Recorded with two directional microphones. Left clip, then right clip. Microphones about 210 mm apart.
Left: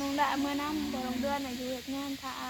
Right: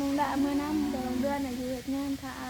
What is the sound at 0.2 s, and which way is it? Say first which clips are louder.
Speech: left 2 dB; 10° left (ahead or behind).